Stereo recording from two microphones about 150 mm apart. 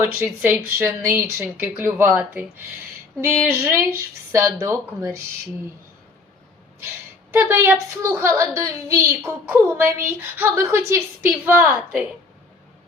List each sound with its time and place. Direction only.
0.0 s a woman's voice: 15° right (ahead or behind)
7.3 s a woman's voice: 15° right (ahead or behind)